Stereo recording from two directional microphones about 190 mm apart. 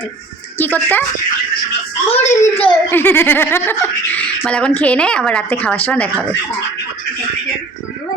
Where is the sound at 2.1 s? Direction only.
35° left (ahead or behind).